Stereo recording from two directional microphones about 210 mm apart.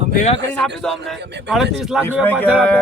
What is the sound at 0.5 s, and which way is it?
A man's voice, 5° left (ahead or behind).